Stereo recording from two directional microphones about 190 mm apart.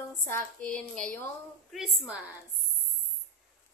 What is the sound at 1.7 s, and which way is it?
Speech, 5° right (ahead or behind).